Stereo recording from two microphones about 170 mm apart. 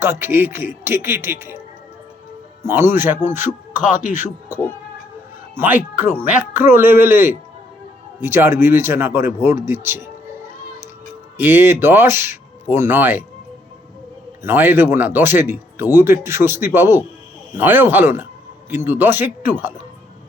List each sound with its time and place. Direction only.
0.0 s speech: 15° right (ahead or behind)
2.6 s speech: 15° right (ahead or behind)
3.8 s speech: 50° left (ahead or behind)
5.5 s speech: 10° right (ahead or behind)
11.3 s speech: 10° right (ahead or behind)
14.4 s speech: 10° right (ahead or behind)